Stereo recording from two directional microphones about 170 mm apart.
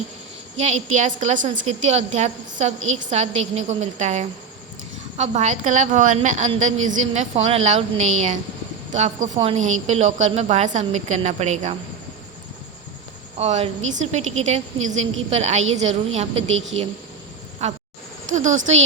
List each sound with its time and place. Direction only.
0.6 s a woman's voice: 45° right (ahead or behind)
13.4 s a woman's voice: 40° right (ahead or behind)